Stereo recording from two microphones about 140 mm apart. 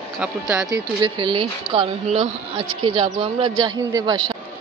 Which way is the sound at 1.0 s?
30° right (ahead or behind).